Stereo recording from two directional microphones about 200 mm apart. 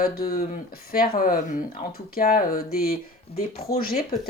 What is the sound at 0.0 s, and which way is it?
Speech, 45° left (ahead or behind).